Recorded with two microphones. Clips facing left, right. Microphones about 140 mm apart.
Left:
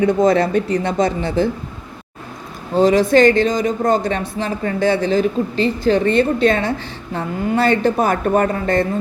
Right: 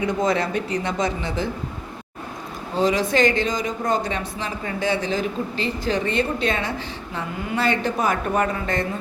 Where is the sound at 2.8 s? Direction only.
60° left (ahead or behind).